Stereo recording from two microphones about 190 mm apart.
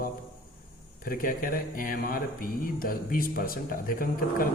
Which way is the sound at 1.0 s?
50° left (ahead or behind).